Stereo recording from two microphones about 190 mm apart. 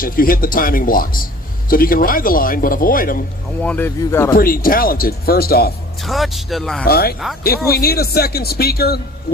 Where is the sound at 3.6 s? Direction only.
10° left (ahead or behind).